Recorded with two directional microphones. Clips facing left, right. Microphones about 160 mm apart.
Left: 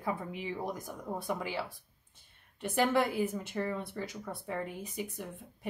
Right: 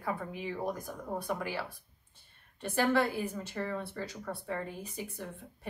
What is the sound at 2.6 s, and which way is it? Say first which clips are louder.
A woman's voice: even; 20° left (ahead or behind).